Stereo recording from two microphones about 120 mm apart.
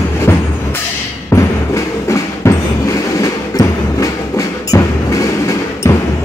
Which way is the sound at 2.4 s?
25° left (ahead or behind).